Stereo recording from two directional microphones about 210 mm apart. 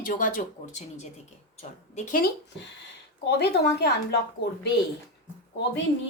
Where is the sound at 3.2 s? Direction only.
50° left (ahead or behind).